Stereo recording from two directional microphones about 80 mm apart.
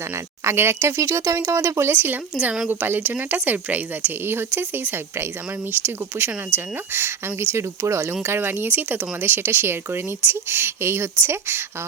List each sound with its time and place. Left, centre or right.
0.4 s speech: right
2.3 s a woman's voice: centre; by 11.6 s right